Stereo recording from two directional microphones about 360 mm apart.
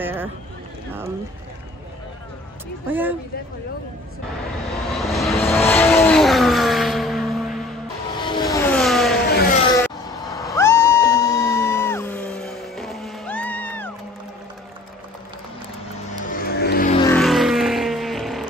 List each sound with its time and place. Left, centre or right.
0.0 s a sound: centre
2.9 s speech: centre
4.9 s vehicle: centre
8.2 s vehicle: centre
8.5 s vehicle: centre
9.3 s a sound: left
9.8 s cat: centre
16.3 s vehicle: left
17.0 s vehicle: centre